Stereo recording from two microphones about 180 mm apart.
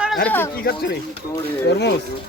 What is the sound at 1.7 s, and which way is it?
Speech, 70° left (ahead or behind).